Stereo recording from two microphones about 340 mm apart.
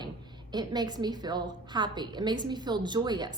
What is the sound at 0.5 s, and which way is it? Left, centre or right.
A woman's voice, centre.